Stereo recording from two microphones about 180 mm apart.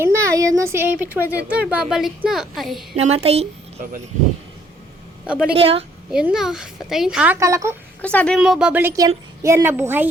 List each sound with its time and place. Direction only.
0.0 s speech: 15° right (ahead or behind)
2.9 s a woman's voice: 35° right (ahead or behind)
5.2 s speech: 5° right (ahead or behind)
5.5 s a woman's voice: 30° right (ahead or behind)
6.1 s speech: 5° right (ahead or behind)
8.0 s a woman's voice: 5° left (ahead or behind)
8.4 s speech: 5° right (ahead or behind)